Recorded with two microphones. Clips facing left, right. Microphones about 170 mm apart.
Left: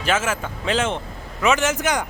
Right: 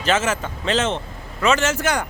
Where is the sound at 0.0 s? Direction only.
10° left (ahead or behind).